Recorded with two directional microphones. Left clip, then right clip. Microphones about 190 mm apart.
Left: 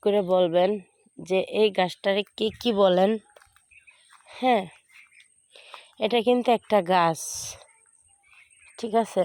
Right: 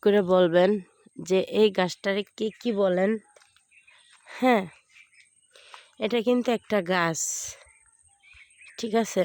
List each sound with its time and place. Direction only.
0.0 s speech: 40° right (ahead or behind); by 3.2 s 10° right (ahead or behind)
4.3 s speech: 35° right (ahead or behind)
5.8 s speech: 20° right (ahead or behind)
8.8 s speech: 35° right (ahead or behind)